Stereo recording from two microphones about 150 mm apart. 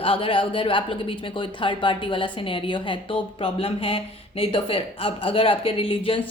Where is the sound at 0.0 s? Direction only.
35° left (ahead or behind).